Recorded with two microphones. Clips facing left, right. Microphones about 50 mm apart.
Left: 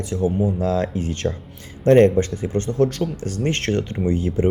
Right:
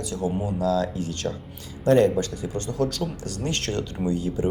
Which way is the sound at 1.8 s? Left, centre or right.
Left.